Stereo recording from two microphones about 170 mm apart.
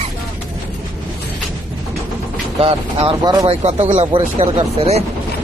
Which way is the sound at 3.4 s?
35° right (ahead or behind).